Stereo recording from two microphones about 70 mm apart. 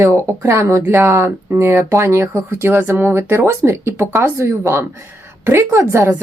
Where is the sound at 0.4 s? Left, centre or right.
Right.